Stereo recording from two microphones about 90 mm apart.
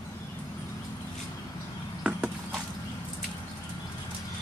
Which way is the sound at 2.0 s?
10° right (ahead or behind).